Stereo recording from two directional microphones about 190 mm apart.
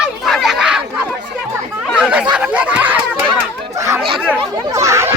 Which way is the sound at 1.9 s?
5° right (ahead or behind).